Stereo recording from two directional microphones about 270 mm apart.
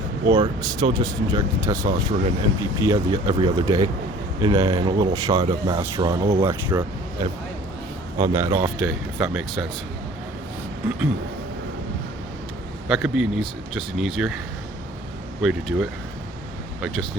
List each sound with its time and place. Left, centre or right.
0.3 s speech: centre
12.9 s speech: centre
15.4 s speech: centre